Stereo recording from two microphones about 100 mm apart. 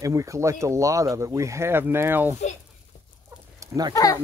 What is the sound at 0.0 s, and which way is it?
Speech, 30° right (ahead or behind).